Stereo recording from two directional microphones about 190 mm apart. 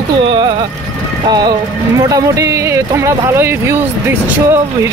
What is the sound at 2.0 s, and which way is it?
Speech, 20° right (ahead or behind).